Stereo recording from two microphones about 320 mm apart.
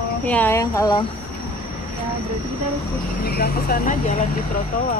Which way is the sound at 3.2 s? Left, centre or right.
Left.